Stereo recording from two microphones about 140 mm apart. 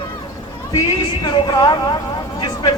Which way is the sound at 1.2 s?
30° left (ahead or behind).